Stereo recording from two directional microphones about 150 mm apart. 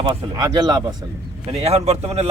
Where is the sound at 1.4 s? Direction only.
45° right (ahead or behind).